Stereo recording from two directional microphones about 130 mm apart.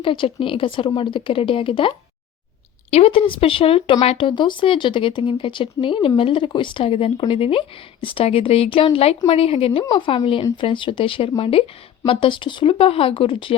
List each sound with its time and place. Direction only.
0.0 s speech: 40° left (ahead or behind)
9.8 s speech: 35° left (ahead or behind)